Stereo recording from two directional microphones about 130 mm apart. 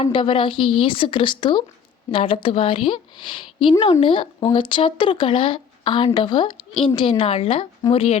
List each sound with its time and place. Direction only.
0.0 s a woman's voice: 40° left (ahead or behind)